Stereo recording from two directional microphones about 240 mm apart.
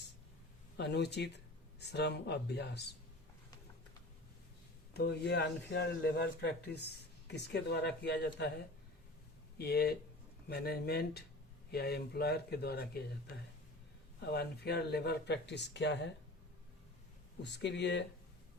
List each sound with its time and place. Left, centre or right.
0.8 s speech: left
4.9 s speech: left
9.6 s speech: left
17.4 s speech: left